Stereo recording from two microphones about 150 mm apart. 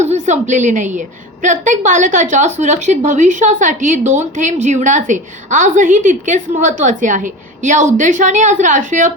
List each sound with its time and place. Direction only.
0.0 s a woman's voice: 50° right (ahead or behind)